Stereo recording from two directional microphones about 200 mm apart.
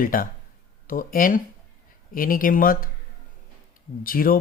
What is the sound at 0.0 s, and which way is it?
Speech, 45° left (ahead or behind).